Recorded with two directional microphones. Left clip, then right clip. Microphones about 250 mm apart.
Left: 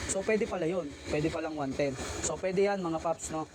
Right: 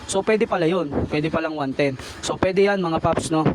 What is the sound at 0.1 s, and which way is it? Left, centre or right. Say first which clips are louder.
Speech: right 11 dB; right.